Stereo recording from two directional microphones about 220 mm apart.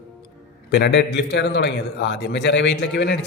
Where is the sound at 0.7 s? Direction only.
50° left (ahead or behind).